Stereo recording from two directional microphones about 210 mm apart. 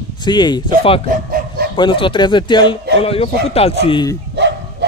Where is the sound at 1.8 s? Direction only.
25° left (ahead or behind).